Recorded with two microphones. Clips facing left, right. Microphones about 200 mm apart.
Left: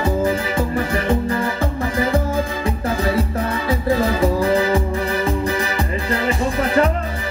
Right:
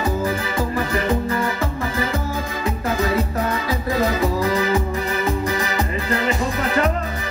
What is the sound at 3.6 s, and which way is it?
Music, 30° left (ahead or behind).